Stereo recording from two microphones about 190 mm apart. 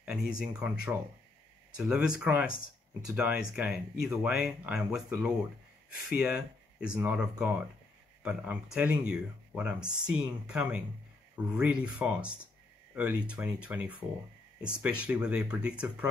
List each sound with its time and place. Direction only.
0.3 s speech: 5° right (ahead or behind)